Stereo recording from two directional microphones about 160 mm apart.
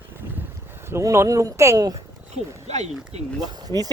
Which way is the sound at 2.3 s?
45° right (ahead or behind).